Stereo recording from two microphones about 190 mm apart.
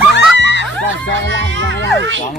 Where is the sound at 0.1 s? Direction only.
65° left (ahead or behind).